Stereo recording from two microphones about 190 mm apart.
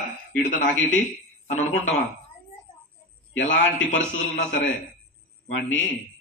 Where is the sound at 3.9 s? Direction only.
75° left (ahead or behind).